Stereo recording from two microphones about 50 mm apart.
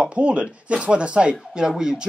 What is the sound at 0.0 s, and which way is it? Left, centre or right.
Speech, right.